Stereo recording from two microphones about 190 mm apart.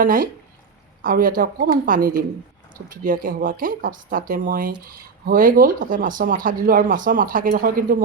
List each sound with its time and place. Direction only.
0.0 s speech: 45° right (ahead or behind)